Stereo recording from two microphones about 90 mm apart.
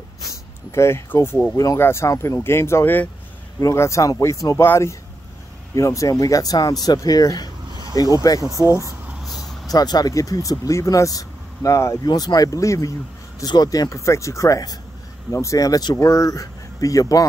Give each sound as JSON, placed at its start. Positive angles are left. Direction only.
{"t": 0.3, "sound": "speech", "side_deg": 30}
{"t": 3.5, "sound": "speech", "side_deg": 35}
{"t": 9.2, "sound": "vehicle", "side_deg": 0}
{"t": 9.7, "sound": "speech", "side_deg": 45}
{"t": 12.0, "sound": "speech", "side_deg": 50}